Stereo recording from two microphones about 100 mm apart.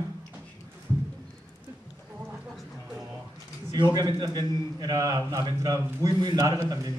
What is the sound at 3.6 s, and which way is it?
A woman's voice, 45° right (ahead or behind).